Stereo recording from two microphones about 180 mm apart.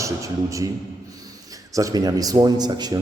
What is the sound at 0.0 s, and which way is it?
Speech, 15° right (ahead or behind).